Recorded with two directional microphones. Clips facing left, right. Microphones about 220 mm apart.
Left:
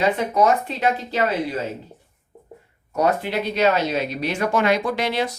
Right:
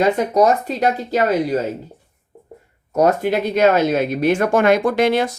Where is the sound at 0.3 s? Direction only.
40° right (ahead or behind).